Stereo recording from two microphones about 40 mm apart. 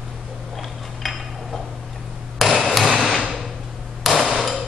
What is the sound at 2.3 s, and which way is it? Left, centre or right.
Hammer, centre.